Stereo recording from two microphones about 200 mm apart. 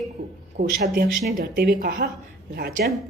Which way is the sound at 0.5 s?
40° right (ahead or behind).